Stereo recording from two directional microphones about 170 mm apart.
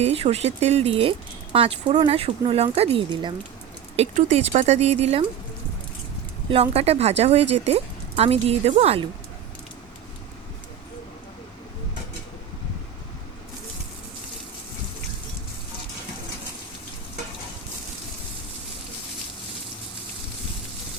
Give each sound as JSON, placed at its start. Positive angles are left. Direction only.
{"t": 0.0, "sound": "speech", "side_deg": -35}
{"t": 6.5, "sound": "speech", "side_deg": -35}